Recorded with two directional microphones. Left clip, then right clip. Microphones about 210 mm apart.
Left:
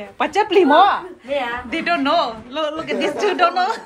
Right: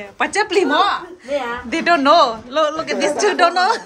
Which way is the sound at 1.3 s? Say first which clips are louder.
Right 1 dB; 10° right (ahead or behind).